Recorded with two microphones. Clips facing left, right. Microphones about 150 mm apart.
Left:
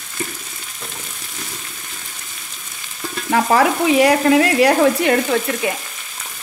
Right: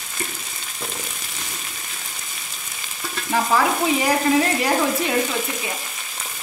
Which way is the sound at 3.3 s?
75° left (ahead or behind).